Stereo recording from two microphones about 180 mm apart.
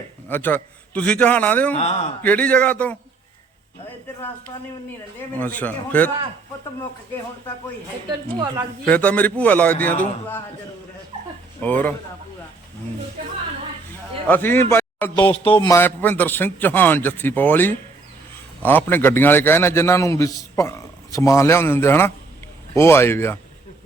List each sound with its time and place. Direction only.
0.3 s a man's voice: 10° left (ahead or behind)
1.7 s a man's voice: 35° left (ahead or behind)
2.2 s a man's voice: 10° left (ahead or behind)
5.4 s a man's voice: 10° left (ahead or behind)
8.4 s speech: 20° right (ahead or behind)
8.9 s a man's voice: 10° left (ahead or behind)
11.6 s a man's voice: 10° left (ahead or behind)
14.3 s speech: 10° left (ahead or behind)
15.3 s speech: 30° left (ahead or behind)
15.7 s a man's voice: 10° left (ahead or behind)